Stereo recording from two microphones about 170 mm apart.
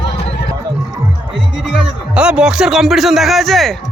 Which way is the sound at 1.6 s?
5° right (ahead or behind).